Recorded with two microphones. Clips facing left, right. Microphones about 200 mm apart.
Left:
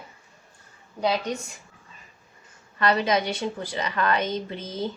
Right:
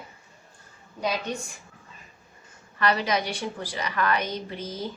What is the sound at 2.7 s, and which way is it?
A woman's voice, 25° left (ahead or behind).